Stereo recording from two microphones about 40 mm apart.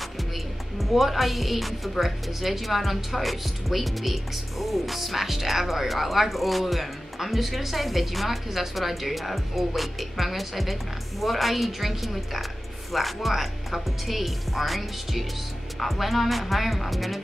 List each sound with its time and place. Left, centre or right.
0.7 s a woman's voice: centre